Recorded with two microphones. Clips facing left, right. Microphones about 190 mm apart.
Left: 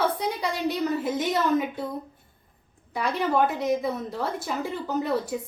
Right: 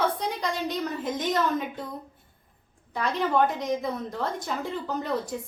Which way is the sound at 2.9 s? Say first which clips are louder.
Left 1 dB; 10° left (ahead or behind).